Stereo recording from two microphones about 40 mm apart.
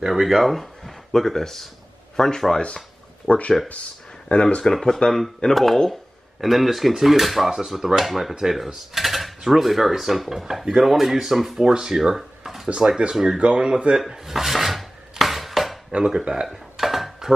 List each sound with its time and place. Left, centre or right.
0.1 s speech: centre
3.3 s speech: left
4.6 s speech: centre
12.7 s speech: centre
13.9 s filing: centre
16.0 s speech: centre
16.7 s dishes: centre